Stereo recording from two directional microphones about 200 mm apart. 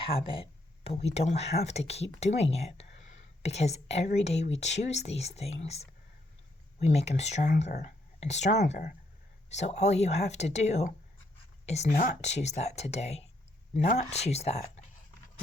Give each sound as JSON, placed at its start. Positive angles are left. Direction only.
{"t": 0.0, "sound": "speech", "side_deg": 25}